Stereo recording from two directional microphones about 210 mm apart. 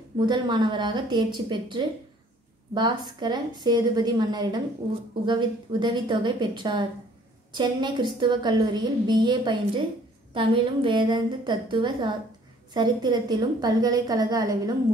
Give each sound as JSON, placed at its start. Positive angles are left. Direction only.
{"t": 0.2, "sound": "a woman's voice", "side_deg": -20}